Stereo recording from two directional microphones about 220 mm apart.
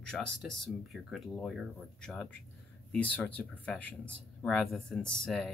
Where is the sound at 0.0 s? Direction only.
5° left (ahead or behind).